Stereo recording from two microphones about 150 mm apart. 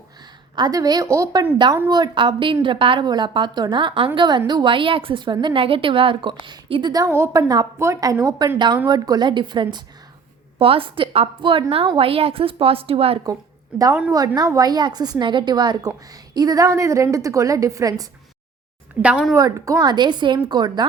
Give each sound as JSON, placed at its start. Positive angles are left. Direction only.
{"t": 0.5, "sound": "a woman's voice", "side_deg": -25}
{"t": 14.1, "sound": "a woman's voice", "side_deg": -25}
{"t": 19.0, "sound": "a woman's voice", "side_deg": -5}
{"t": 19.3, "sound": "a woman's voice", "side_deg": -20}